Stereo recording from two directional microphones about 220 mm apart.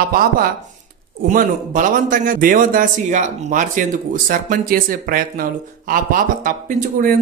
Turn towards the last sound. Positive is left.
turn(degrees=-40)  # may be behind; listen again after turning